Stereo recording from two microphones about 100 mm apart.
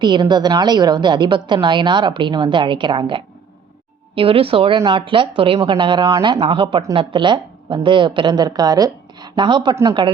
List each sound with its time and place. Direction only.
0.0 s a woman's voice: 50° right (ahead or behind)
4.1 s a woman's voice: 65° right (ahead or behind); by 9.3 s 40° right (ahead or behind)
9.3 s speech: 55° right (ahead or behind)